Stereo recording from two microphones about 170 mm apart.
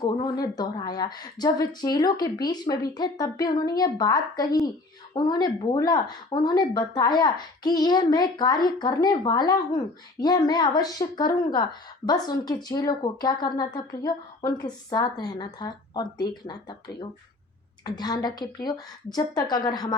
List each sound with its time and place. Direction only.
0.0 s speech: 20° left (ahead or behind)